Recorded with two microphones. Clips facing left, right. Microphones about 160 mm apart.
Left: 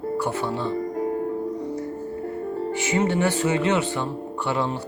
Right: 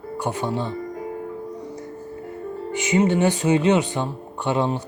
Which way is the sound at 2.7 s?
20° right (ahead or behind).